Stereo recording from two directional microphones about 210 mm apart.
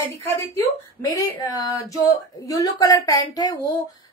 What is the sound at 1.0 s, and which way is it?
A woman's voice, 15° left (ahead or behind).